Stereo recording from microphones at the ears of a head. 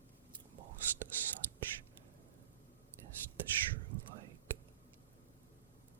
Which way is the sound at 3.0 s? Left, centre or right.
Right.